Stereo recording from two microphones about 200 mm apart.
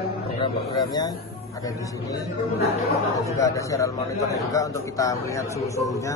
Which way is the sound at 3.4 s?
15° left (ahead or behind).